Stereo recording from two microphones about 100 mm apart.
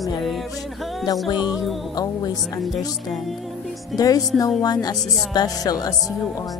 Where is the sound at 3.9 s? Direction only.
40° left (ahead or behind).